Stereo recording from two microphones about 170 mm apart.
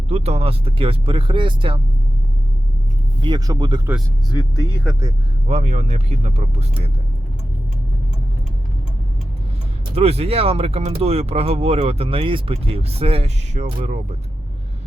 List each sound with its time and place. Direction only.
0.1 s speech: 35° right (ahead or behind)
3.2 s speech: 25° right (ahead or behind)
4.3 s speech: 20° left (ahead or behind)
5.5 s speech: 40° right (ahead or behind)
9.9 s speech: 35° right (ahead or behind)